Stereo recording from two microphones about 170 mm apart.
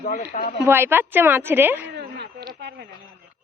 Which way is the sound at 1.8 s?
85° right.